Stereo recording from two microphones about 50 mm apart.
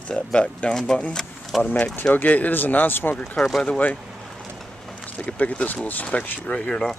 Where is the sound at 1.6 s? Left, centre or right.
Left.